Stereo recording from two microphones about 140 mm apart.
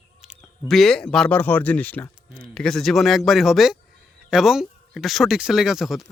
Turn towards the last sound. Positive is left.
turn(degrees=0)  # may be behind; listen again after turning